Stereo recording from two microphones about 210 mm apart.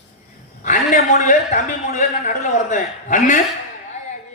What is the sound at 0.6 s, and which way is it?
A man's voice, 35° left (ahead or behind).